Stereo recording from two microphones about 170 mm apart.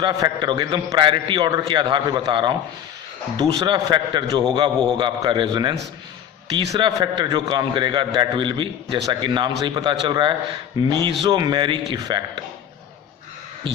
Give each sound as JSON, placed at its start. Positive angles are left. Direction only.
{"t": 0.0, "sound": "a man's voice", "side_deg": -25}
{"t": 3.6, "sound": "a man's voice", "side_deg": -25}